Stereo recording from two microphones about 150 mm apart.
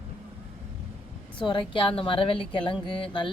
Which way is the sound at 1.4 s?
35° left (ahead or behind).